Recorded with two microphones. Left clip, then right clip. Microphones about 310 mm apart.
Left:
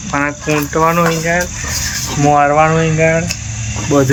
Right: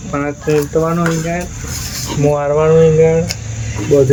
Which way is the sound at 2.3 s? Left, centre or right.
Left.